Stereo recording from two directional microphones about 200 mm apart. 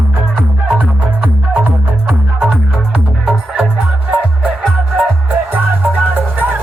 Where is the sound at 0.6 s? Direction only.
5° right (ahead or behind).